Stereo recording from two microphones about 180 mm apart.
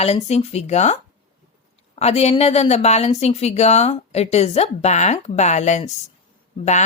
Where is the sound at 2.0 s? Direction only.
35° left (ahead or behind).